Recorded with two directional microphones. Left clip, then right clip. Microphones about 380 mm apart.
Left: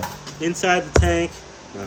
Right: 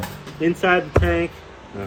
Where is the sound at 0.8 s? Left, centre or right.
Left.